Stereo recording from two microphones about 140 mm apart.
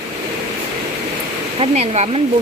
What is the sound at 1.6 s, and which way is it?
Speech, 45° right (ahead or behind).